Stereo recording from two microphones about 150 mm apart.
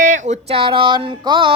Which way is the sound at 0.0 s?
55° right (ahead or behind).